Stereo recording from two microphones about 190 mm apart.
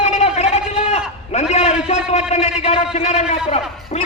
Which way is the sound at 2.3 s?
35° left (ahead or behind).